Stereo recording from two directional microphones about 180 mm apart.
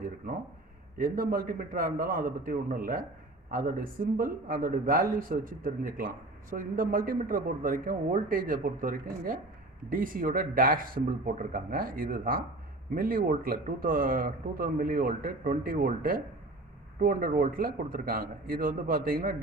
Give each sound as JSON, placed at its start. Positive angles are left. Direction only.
{"t": 0.9, "sound": "speech", "side_deg": -50}